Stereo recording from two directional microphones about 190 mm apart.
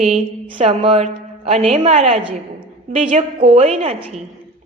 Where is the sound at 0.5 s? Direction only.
30° right (ahead or behind).